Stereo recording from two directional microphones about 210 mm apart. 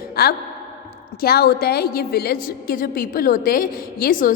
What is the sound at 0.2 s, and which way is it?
A woman's voice, 45° left (ahead or behind).